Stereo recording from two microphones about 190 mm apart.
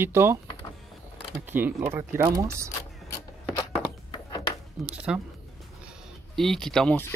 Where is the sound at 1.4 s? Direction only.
10° right (ahead or behind).